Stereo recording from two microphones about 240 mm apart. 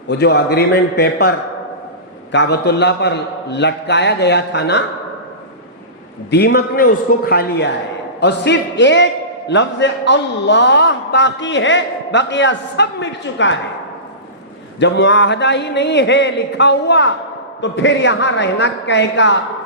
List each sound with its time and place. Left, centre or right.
0.1 s a man's voice: left
2.3 s a man's voice: left
6.3 s a man's voice: left
14.8 s a man's voice: left